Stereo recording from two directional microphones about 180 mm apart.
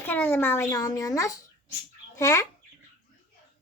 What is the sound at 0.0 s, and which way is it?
A child's voice, 10° left (ahead or behind).